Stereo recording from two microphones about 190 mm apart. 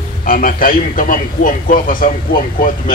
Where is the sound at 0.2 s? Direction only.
45° left (ahead or behind).